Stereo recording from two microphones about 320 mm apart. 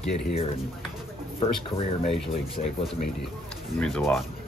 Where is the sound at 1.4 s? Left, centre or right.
Centre.